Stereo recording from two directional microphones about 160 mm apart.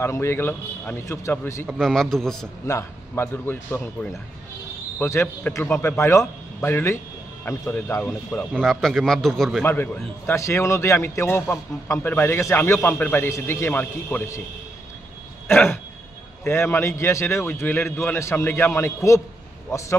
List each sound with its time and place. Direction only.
0.0 s a man's voice: 15° left (ahead or behind)
1.7 s a man's voice: centre (ahead or behind)
2.6 s a man's voice: 15° left (ahead or behind)
10.2 s a man's voice: 15° left (ahead or behind)
15.4 s throat clearing: 15° left (ahead or behind)
16.4 s a man's voice: 15° left (ahead or behind)